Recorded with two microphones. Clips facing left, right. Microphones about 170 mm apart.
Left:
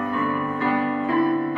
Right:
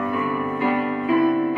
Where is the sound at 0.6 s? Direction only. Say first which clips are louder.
Even; 15° right (ahead or behind).